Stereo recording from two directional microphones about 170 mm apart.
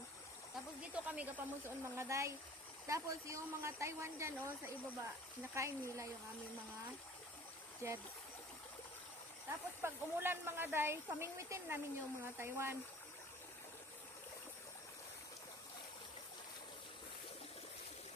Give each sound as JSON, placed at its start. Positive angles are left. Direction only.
{"t": 1.0, "sound": "speech", "side_deg": -10}
{"t": 7.8, "sound": "speech", "side_deg": -15}
{"t": 9.8, "sound": "speech", "side_deg": -15}